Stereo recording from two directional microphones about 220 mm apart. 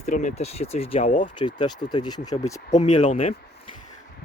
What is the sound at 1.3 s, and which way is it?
Speech, 20° left (ahead or behind).